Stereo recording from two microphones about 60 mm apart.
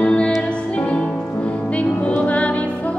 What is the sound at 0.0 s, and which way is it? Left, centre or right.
Music, centre.